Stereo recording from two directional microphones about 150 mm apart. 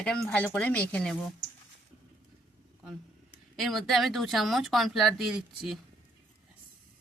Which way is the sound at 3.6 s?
Centre (ahead or behind).